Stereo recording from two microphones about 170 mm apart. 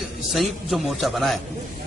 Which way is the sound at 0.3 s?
Centre (ahead or behind).